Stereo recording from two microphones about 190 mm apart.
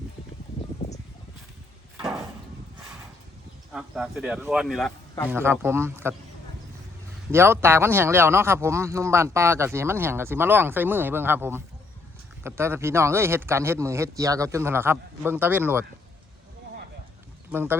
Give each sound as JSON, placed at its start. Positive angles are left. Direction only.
{"t": 0.8, "sound": "a sound", "side_deg": 30}
{"t": 3.7, "sound": "speech", "side_deg": -5}
{"t": 7.3, "sound": "speech", "side_deg": -10}
{"t": 17.5, "sound": "speech", "side_deg": -10}